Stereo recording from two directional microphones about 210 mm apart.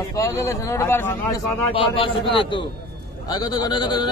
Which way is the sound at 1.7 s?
25° left (ahead or behind).